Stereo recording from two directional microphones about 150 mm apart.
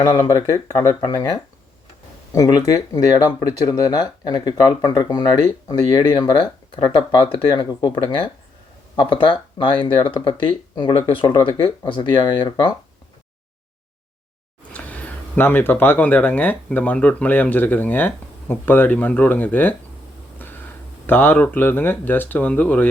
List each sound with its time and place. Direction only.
0.0 s speech: 30° left (ahead or behind)
14.7 s speech: 10° left (ahead or behind)
20.4 s a sound: 10° left (ahead or behind)
21.1 s speech: 15° left (ahead or behind)